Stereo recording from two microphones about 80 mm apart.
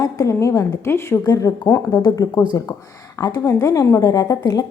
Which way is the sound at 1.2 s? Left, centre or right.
Left.